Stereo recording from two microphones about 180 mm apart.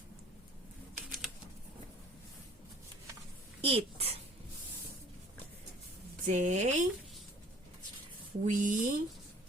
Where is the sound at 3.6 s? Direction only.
35° right (ahead or behind).